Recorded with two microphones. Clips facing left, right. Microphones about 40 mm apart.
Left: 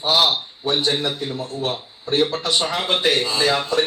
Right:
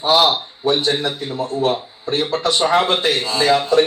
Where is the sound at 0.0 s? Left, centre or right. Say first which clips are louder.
Right 4 dB; centre.